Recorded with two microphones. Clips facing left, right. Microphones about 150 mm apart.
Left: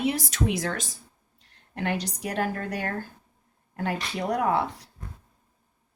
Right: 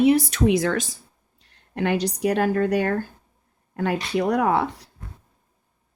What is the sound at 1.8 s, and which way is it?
A woman's voice, 75° right (ahead or behind).